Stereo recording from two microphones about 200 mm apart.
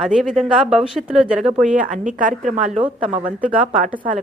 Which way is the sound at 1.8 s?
40° right (ahead or behind).